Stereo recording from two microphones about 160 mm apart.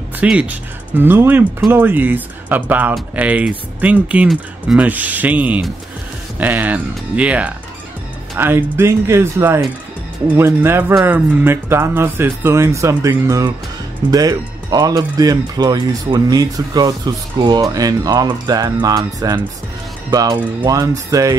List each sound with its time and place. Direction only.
0.2 s speech: 5° right (ahead or behind)